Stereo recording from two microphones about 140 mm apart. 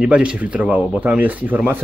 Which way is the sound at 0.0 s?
10° right (ahead or behind).